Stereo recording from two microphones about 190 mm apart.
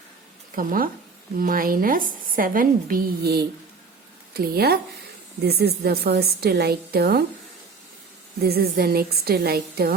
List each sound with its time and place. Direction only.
0.5 s a woman's voice: 45° right (ahead or behind)
8.4 s a woman's voice: 55° right (ahead or behind)